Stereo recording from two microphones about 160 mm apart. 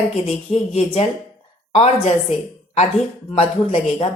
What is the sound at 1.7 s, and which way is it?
Speech, 40° left (ahead or behind).